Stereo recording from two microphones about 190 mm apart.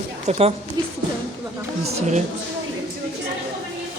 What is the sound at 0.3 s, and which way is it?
Speech, 35° right (ahead or behind).